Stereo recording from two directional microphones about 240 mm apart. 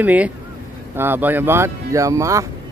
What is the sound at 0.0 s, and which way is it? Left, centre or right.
Speech, centre.